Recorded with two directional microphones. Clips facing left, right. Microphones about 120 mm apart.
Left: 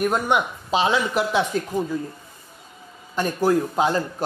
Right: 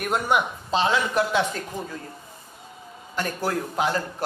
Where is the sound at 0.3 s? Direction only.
15° left (ahead or behind).